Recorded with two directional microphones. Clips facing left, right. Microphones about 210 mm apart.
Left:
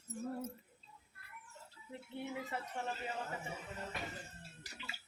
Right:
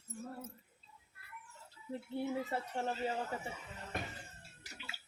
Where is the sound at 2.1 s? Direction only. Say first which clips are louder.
Right 5 dB; 40° right (ahead or behind).